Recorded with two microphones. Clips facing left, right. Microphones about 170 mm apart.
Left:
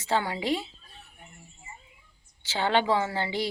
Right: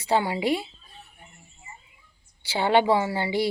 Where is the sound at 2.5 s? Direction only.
15° right (ahead or behind).